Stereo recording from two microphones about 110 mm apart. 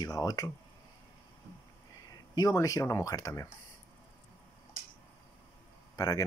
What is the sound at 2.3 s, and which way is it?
Speech, 30° left (ahead or behind).